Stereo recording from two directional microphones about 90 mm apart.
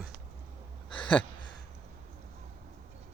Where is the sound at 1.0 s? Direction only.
15° left (ahead or behind).